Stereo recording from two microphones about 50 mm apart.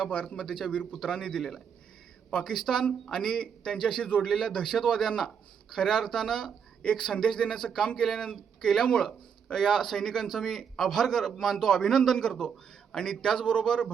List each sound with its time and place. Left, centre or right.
0.0 s speech: centre